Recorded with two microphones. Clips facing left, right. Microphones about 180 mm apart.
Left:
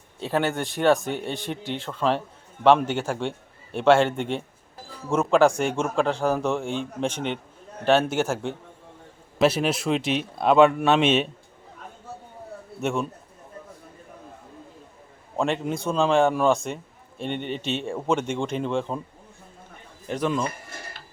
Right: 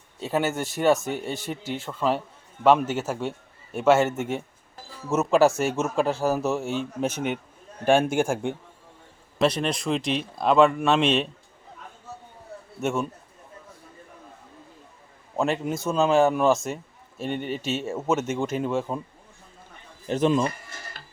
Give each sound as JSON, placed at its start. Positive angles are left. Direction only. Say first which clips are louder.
{"t": 0.2, "sound": "a man's voice", "louder": "left 1 dB", "side_deg": -5}
{"t": 9.4, "sound": "a man's voice", "louder": "left 2 dB", "side_deg": 5}
{"t": 12.8, "sound": "a man's voice", "louder": "even", "side_deg": 0}
{"t": 15.4, "sound": "a man's voice", "louder": "even", "side_deg": -5}
{"t": 20.1, "sound": "speech", "louder": "right 4 dB", "side_deg": -25}